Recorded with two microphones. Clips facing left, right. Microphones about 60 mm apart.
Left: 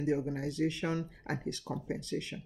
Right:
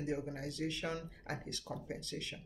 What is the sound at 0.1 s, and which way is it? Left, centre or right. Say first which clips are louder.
Speech: left 9 dB; left.